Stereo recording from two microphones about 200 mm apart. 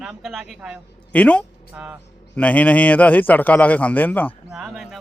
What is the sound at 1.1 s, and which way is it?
A man's voice, 5° left (ahead or behind).